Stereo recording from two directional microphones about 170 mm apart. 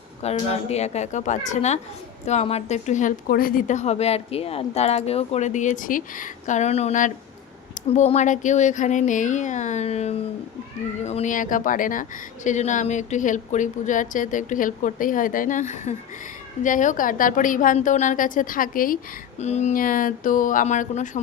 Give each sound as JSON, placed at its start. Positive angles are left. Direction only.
{"t": 0.2, "sound": "a woman's voice", "side_deg": 40}
{"t": 19.4, "sound": "a woman's voice", "side_deg": 40}